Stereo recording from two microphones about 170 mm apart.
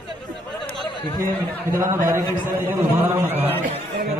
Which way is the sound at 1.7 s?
15° right (ahead or behind).